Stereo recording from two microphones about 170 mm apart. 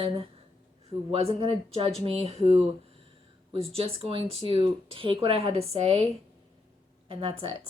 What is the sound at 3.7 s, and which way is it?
Speech, 35° right (ahead or behind).